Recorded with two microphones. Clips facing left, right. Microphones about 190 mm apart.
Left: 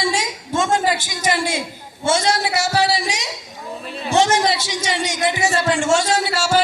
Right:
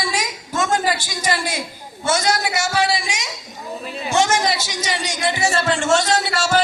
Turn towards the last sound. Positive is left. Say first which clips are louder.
# left 1 dB
turn(degrees=10)  # may be behind; listen again after turning